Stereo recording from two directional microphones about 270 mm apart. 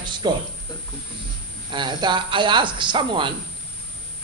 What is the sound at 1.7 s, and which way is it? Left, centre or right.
Speech, centre.